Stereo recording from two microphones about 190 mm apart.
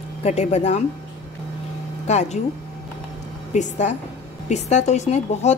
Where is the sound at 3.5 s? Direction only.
40° left (ahead or behind).